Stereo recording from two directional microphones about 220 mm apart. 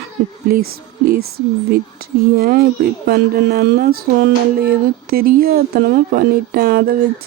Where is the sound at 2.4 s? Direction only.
45° right (ahead or behind).